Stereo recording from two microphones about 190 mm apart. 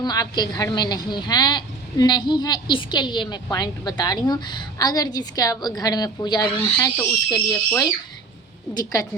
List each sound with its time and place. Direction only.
0.0 s a woman's voice: 20° left (ahead or behind)